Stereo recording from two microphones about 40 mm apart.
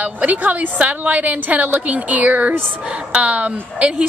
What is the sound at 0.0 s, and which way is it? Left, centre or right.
A woman's voice, right.